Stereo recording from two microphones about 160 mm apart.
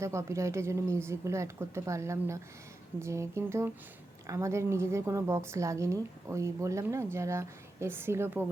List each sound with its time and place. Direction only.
0.0 s a woman's voice: 20° right (ahead or behind)